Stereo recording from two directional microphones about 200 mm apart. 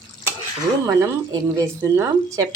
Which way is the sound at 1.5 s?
15° right (ahead or behind).